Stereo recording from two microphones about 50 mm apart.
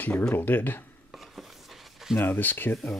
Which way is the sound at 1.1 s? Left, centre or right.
Centre.